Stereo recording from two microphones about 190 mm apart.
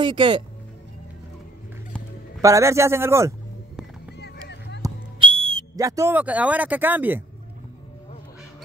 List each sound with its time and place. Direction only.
0.0 s speech: 25° right (ahead or behind)
1.9 s music: 5° left (ahead or behind)
2.4 s a man's voice: 15° right (ahead or behind)
4.2 s a sound: 60° left (ahead or behind)
4.8 s whistle: 25° right (ahead or behind); by 7.2 s 10° right (ahead or behind)